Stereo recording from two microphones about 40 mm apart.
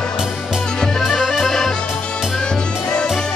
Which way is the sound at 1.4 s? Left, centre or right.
Centre.